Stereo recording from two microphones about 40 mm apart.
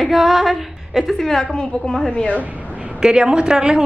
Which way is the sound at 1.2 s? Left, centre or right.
Centre.